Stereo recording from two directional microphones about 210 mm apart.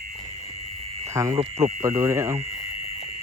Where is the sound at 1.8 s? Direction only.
10° right (ahead or behind).